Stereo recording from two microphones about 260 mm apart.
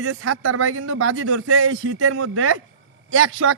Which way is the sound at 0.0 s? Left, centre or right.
Right.